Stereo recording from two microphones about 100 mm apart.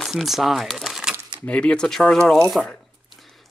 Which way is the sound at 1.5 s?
10° left (ahead or behind).